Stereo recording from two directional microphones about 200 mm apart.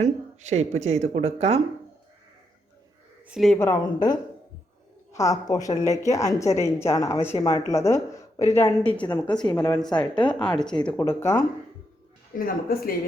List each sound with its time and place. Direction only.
0.0 s speech: 35° right (ahead or behind)
3.2 s speech: centre (ahead or behind)
3.6 s a woman's voice: 20° left (ahead or behind)
12.4 s speech: 45° left (ahead or behind)